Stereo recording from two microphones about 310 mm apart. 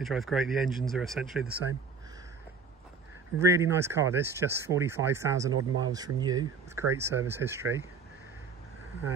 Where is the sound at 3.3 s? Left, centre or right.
Centre.